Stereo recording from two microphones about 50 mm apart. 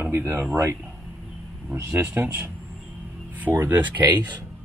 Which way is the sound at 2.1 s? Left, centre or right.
Right.